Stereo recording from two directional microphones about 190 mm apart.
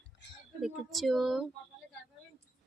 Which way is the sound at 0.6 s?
Centre (ahead or behind).